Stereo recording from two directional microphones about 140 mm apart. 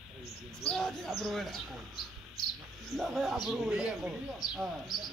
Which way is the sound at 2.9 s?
Centre (ahead or behind).